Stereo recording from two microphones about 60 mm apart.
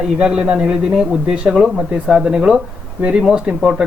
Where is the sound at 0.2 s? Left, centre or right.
Centre.